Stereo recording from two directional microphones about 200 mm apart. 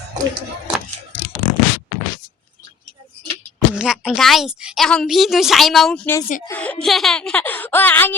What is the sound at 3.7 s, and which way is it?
A woman's voice, 5° right (ahead or behind).